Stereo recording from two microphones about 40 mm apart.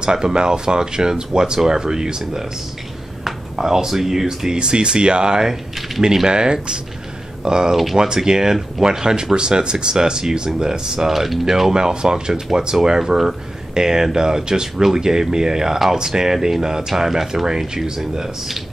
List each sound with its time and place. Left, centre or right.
0.0 s speech: right
3.5 s speech: centre
4.6 s speech: right